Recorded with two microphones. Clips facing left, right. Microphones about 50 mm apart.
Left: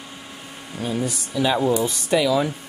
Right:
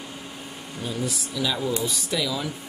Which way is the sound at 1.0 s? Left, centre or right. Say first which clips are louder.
Left 2 dB; centre.